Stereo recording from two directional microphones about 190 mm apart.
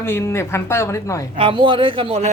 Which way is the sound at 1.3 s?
25° right (ahead or behind).